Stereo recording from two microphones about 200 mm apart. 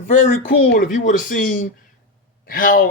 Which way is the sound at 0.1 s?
40° left (ahead or behind).